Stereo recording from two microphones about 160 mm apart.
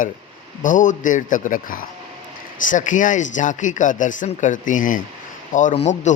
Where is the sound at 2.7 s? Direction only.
50° left (ahead or behind).